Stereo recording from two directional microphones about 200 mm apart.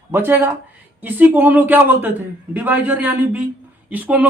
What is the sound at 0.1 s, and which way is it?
Speech, 10° right (ahead or behind).